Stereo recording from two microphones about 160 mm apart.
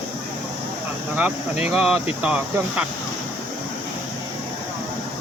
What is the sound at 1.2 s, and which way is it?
Speech, 5° right (ahead or behind).